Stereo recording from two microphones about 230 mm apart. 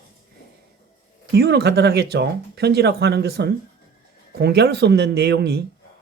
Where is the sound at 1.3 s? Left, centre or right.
Right.